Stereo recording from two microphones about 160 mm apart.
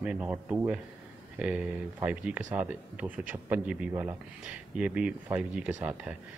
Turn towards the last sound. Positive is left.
turn(degrees=-5)  # may be behind; listen again after turning